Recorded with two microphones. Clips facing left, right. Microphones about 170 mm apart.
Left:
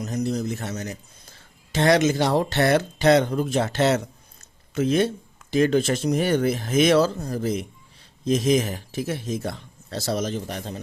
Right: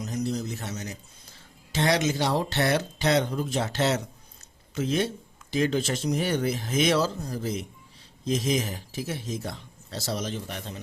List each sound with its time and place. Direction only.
0.0 s speech: 50° left (ahead or behind)